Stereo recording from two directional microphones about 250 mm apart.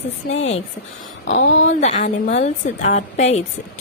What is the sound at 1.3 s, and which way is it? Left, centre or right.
Music, left.